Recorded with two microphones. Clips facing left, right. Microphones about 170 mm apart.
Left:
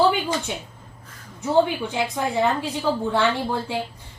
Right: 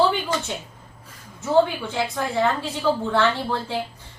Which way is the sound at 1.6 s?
15° left (ahead or behind).